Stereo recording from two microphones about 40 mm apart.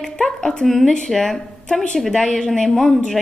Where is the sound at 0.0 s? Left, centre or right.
Centre.